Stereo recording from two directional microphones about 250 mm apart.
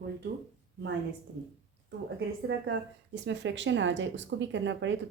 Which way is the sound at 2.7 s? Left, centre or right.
Right.